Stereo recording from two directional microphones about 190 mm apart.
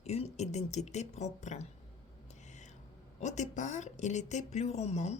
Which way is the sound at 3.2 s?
40° left (ahead or behind).